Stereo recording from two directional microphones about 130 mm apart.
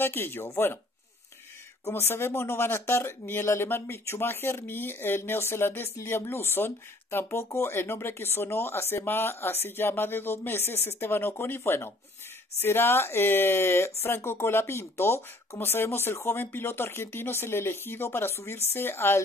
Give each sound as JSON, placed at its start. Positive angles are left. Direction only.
{"t": 0.0, "sound": "speech", "side_deg": 15}
{"t": 1.9, "sound": "speech", "side_deg": 20}